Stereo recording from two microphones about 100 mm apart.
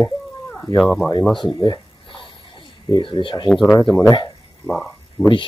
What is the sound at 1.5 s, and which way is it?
Speech, 40° left (ahead or behind).